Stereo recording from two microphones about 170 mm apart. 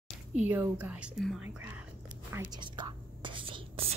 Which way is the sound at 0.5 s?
10° right (ahead or behind).